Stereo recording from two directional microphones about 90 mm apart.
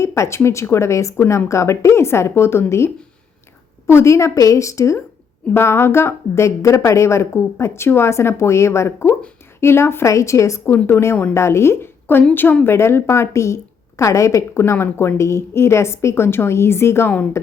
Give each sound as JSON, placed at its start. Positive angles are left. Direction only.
{"t": 0.0, "sound": "a woman's voice", "side_deg": 30}
{"t": 10.7, "sound": "a woman's voice", "side_deg": 25}